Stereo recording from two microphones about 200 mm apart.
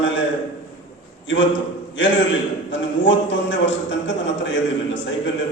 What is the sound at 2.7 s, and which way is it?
A man's voice, 65° left (ahead or behind).